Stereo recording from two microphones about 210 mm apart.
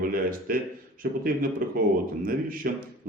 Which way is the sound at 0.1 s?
45° right (ahead or behind).